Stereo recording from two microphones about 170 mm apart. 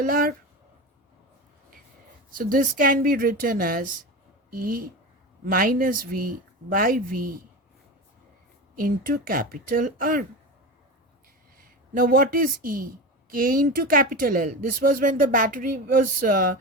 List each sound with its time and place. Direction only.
0.0 s speech: 55° right (ahead or behind)
2.3 s speech: 55° right (ahead or behind)
8.7 s speech: 55° right (ahead or behind)
11.9 s speech: 55° right (ahead or behind)